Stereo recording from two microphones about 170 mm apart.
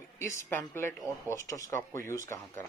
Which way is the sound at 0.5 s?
15° left (ahead or behind).